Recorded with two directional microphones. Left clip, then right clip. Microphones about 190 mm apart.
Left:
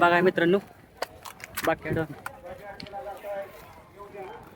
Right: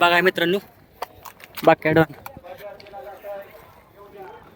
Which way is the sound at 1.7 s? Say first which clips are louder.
Right 12 dB; 50° right (ahead or behind).